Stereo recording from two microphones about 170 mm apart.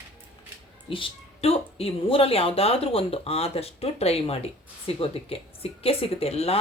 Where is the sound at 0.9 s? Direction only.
35° left (ahead or behind).